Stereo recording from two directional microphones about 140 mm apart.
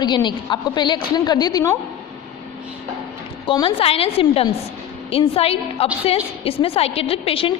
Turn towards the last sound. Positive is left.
turn(degrees=40)  # may be behind; listen again after turning